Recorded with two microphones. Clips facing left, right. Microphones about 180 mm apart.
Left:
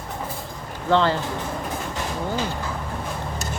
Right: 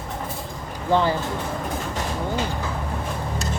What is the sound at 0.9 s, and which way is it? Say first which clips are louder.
Speech: left 1 dB; 10° right (ahead or behind).